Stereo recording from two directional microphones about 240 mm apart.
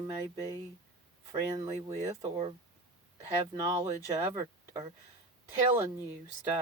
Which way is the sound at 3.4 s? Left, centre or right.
Centre.